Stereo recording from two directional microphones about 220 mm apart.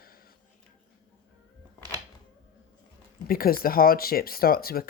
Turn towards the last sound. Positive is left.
turn(degrees=45)  # may be behind; listen again after turning